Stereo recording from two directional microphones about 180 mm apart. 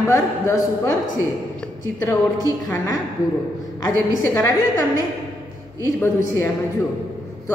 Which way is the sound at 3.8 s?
15° left (ahead or behind).